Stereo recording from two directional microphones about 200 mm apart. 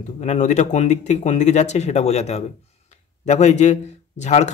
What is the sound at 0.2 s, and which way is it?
A man's voice, 35° left (ahead or behind).